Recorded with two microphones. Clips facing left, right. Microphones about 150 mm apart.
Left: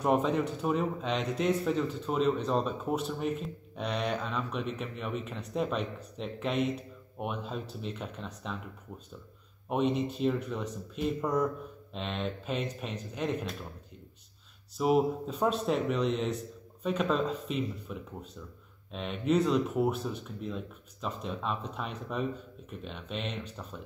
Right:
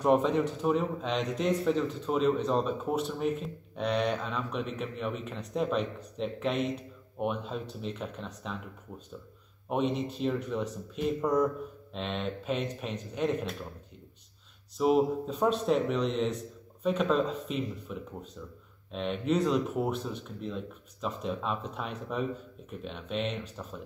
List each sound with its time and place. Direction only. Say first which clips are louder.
0.0 s a man's voice: right 2 dB; centre (ahead or behind)
9.7 s a man's voice: left 1 dB; centre (ahead or behind)
14.8 s a man's voice: right 1 dB; centre (ahead or behind)